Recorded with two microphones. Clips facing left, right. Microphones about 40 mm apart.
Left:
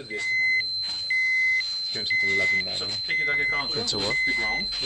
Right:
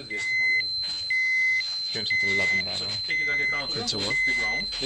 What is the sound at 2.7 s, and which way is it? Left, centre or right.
Speech, centre.